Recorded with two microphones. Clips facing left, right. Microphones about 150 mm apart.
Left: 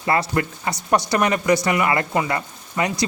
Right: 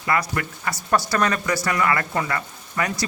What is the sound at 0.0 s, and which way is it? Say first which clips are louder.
Speech: left 3 dB; 25° left (ahead or behind).